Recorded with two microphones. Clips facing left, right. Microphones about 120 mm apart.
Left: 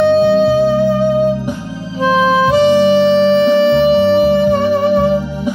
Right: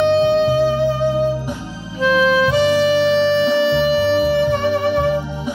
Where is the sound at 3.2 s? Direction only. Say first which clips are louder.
Left 5 dB; 45° left (ahead or behind).